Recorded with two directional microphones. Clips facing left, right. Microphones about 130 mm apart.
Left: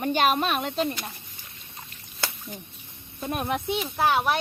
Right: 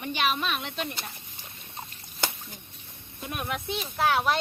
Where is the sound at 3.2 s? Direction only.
35° left (ahead or behind).